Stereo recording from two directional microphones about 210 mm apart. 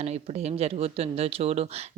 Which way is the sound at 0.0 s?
30° right (ahead or behind).